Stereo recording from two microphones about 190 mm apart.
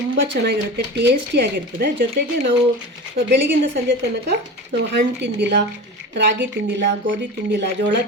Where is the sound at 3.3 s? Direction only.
65° right (ahead or behind).